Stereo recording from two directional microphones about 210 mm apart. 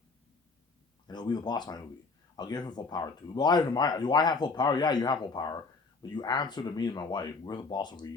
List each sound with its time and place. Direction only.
1.0 s speech: 20° left (ahead or behind)